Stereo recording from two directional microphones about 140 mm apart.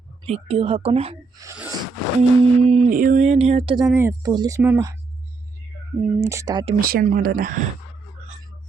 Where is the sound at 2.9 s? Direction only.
70° right (ahead or behind); by 3.7 s 45° right (ahead or behind).